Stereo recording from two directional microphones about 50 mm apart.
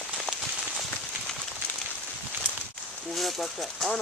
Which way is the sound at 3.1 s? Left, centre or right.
Centre.